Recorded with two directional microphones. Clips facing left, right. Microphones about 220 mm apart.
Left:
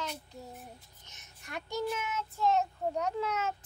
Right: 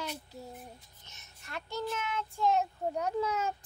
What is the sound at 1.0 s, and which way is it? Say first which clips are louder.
Child singing: left 1 dB; 15° left (ahead or behind).